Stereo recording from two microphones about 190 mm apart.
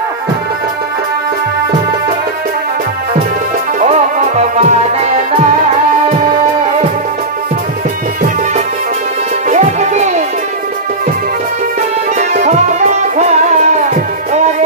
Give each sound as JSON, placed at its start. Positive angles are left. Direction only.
{"t": 3.8, "sound": "music", "side_deg": -40}
{"t": 9.5, "sound": "music", "side_deg": -40}
{"t": 12.2, "sound": "music", "side_deg": -35}